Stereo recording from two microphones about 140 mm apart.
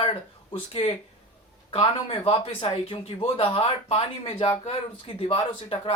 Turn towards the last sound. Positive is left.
turn(degrees=40)  # may be behind; listen again after turning